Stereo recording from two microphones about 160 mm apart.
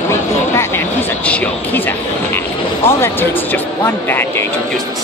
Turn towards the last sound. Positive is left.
turn(degrees=15)  # may be behind; listen again after turning